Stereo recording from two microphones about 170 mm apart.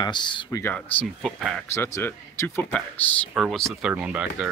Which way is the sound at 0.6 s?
10° left (ahead or behind).